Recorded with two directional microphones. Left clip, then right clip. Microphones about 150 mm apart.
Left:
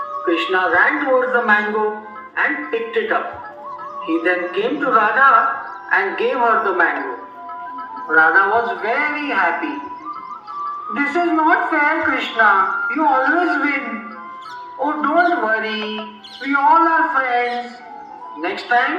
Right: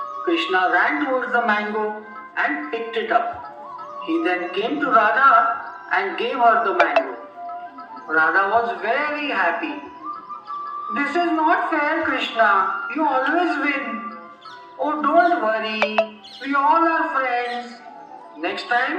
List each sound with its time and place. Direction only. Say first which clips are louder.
0.3 s a man's voice: left 2 dB; 65° right (ahead or behind)
8.0 s a man's voice: left 5 dB; 35° right (ahead or behind)
10.9 s a man's voice: left 3 dB; 30° right (ahead or behind)